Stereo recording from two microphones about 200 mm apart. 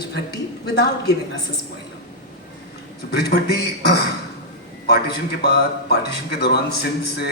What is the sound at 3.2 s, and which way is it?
Speech, 55° left (ahead or behind).